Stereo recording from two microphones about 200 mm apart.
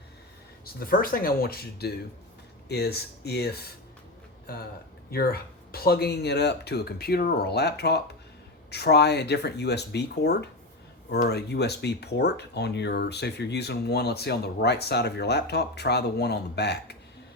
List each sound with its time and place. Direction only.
0.6 s speech: 50° left (ahead or behind)